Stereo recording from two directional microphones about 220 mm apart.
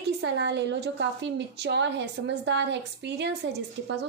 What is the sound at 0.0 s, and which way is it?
A woman's voice, 50° right (ahead or behind).